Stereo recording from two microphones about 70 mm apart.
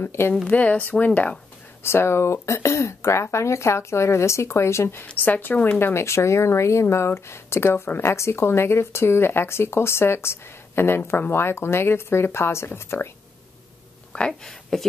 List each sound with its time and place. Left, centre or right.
0.0 s speech: left
0.5 s speech: left
1.8 s speech: left
5.0 s speech: left
5.8 s speech: left
14.1 s speech: centre